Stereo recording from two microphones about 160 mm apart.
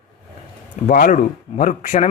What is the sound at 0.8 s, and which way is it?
Speech, 55° left (ahead or behind).